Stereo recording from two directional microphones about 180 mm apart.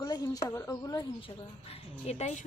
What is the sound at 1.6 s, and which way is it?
Speech, 35° left (ahead or behind).